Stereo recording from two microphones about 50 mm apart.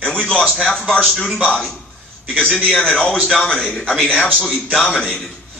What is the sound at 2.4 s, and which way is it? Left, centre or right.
Speech, left.